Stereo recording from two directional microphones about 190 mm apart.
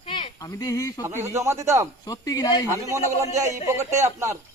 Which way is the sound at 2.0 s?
15° left (ahead or behind).